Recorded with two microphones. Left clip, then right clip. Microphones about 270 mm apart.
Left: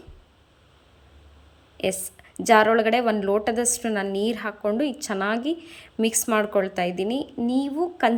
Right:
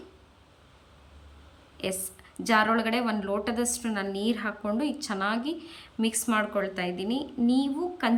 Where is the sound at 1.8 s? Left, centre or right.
Centre.